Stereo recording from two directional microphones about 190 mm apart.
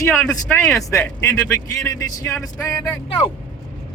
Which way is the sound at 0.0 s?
10° left (ahead or behind).